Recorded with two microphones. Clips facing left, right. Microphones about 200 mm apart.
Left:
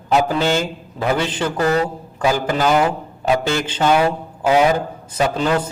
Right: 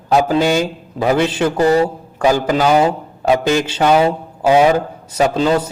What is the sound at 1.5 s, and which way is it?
Speech, 25° right (ahead or behind).